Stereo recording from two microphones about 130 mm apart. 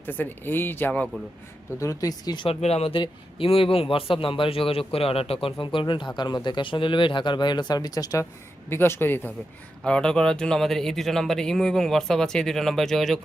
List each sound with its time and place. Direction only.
0.0 s speech: 15° left (ahead or behind)
1.8 s speech: 25° left (ahead or behind)
2.6 s speech: 55° left (ahead or behind); by 13.1 s centre (ahead or behind)